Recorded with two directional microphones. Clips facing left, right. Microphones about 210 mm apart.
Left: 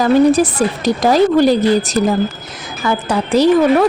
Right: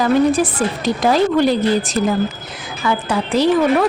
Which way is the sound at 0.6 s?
40° left (ahead or behind).